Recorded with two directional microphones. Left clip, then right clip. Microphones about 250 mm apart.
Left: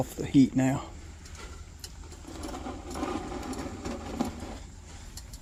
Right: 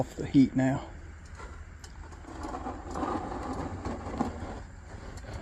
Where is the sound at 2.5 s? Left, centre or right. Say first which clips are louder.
Right 2 dB; centre.